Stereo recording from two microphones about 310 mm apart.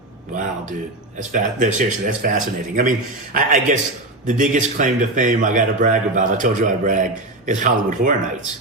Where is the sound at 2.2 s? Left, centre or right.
Right.